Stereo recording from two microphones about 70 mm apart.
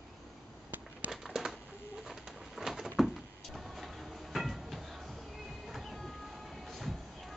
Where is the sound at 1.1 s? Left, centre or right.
Centre.